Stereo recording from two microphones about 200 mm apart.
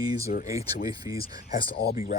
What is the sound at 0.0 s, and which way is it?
Speech, 20° right (ahead or behind).